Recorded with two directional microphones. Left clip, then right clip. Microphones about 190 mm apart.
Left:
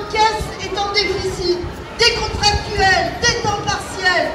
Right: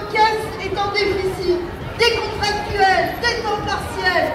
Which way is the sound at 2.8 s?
5° left (ahead or behind).